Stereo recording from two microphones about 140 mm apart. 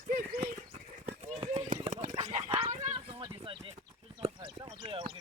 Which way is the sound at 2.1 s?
45° right (ahead or behind).